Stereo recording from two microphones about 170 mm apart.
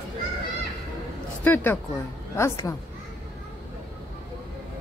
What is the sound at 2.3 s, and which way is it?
Speech, 15° left (ahead or behind).